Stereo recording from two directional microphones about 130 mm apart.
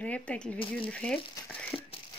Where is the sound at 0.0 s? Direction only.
10° left (ahead or behind).